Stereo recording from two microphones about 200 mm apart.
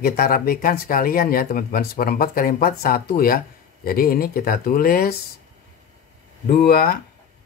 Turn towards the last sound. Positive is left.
turn(degrees=50)  # may be behind; listen again after turning